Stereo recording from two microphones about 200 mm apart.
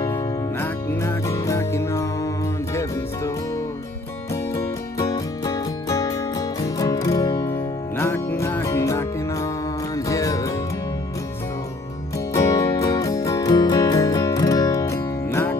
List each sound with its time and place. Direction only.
0.0 s music: 15° left (ahead or behind)
8.1 s music: 10° left (ahead or behind)
12.4 s music: 15° left (ahead or behind)